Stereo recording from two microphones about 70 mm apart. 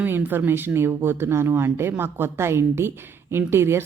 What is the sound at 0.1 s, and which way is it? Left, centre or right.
Speech, right.